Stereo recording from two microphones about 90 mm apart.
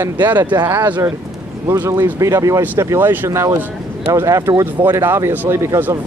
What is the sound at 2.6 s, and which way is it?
Speech, 20° right (ahead or behind).